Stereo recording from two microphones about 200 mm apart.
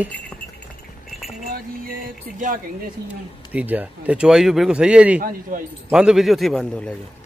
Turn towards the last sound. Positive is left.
turn(degrees=5)  # may be behind; listen again after turning